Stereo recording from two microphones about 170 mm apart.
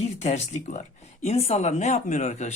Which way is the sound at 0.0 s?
40° left (ahead or behind).